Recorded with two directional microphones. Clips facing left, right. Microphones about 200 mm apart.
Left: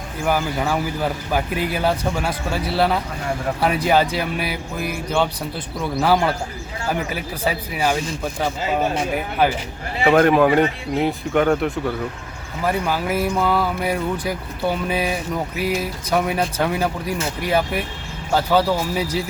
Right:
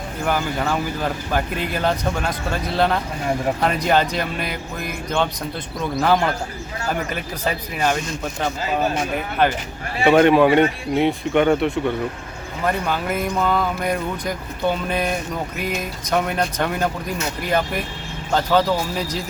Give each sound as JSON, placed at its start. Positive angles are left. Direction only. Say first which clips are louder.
{"t": 0.3, "sound": "speech", "louder": "left 1 dB", "side_deg": 10}